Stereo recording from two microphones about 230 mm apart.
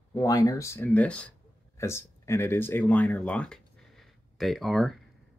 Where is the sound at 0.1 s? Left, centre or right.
Centre.